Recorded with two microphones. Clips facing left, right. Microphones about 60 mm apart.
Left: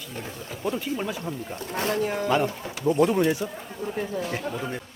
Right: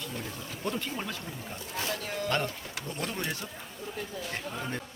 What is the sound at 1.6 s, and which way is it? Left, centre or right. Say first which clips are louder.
Speech: left 8 dB; left.